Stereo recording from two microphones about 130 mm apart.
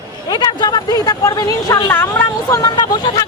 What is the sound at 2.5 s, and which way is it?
Vehicle, 30° left (ahead or behind).